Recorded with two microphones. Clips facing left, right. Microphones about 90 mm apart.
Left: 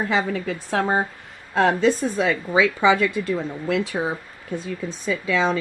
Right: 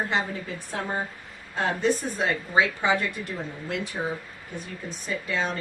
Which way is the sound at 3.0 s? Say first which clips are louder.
Left 9 dB; 90° left.